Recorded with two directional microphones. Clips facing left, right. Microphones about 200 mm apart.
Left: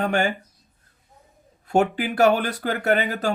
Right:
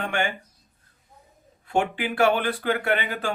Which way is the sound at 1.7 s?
40° left (ahead or behind).